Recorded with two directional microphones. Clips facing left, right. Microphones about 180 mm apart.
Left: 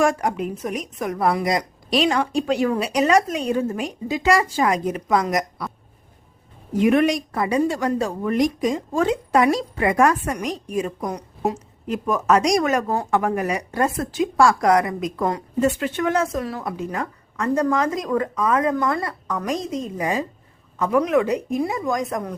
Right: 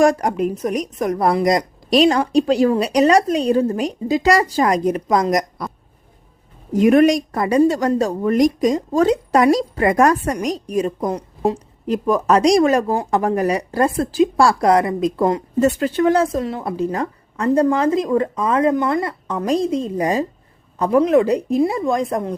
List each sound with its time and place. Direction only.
0.0 s a woman's voice: 40° right (ahead or behind)
6.7 s a woman's voice: 45° right (ahead or behind); by 15.4 s 25° right (ahead or behind)
15.6 s a woman's voice: 40° right (ahead or behind)